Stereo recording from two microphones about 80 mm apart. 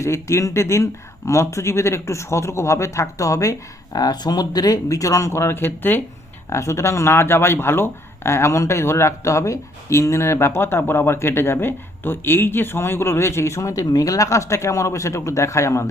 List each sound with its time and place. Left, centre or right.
0.0 s speech: left
3.9 s speech: left